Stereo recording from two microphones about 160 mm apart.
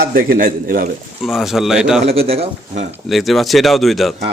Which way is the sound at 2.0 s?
40° right (ahead or behind).